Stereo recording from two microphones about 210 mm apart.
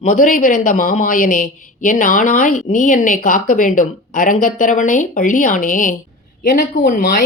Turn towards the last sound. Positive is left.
turn(degrees=40)  # may be behind; listen again after turning